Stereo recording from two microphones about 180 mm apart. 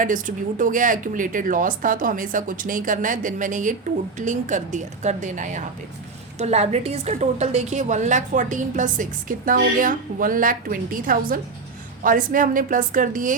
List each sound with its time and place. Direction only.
0.0 s a woman's voice: 45° right (ahead or behind)